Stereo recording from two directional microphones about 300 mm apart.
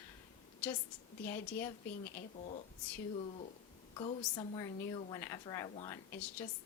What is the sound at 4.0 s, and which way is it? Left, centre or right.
A woman's voice, centre.